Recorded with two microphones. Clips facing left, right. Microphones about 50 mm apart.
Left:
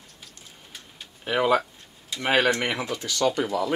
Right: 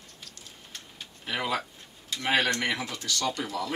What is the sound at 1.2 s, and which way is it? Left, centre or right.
Speech, centre.